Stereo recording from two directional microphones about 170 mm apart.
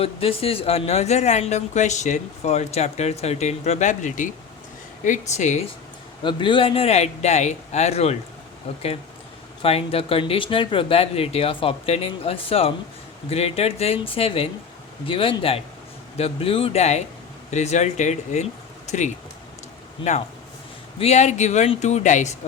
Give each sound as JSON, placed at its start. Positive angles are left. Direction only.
{"t": 0.0, "sound": "speech", "side_deg": 35}
{"t": 6.2, "sound": "speech", "side_deg": 30}
{"t": 21.0, "sound": "speech", "side_deg": 40}